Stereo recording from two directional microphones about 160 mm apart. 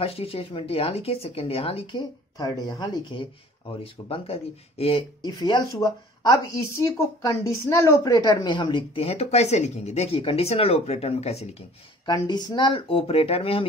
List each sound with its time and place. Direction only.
0.0 s speech: 40° left (ahead or behind)
12.1 s speech: 25° left (ahead or behind)